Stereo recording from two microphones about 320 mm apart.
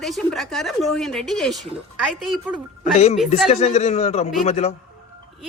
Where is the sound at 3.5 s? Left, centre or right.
Left.